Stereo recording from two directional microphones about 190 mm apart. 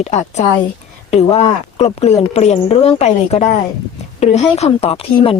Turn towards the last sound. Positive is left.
turn(degrees=30)  # may be behind; listen again after turning